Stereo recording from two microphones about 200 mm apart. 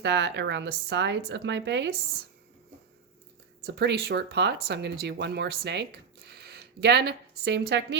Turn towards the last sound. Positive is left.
turn(degrees=-60)  # may be behind; listen again after turning